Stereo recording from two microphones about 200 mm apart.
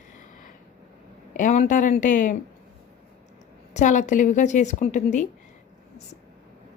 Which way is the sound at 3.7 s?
35° left (ahead or behind).